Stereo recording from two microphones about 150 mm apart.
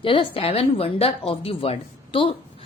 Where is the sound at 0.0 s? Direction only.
35° left (ahead or behind).